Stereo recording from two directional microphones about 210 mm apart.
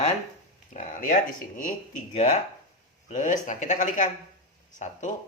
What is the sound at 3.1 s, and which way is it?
Speech, 35° left (ahead or behind).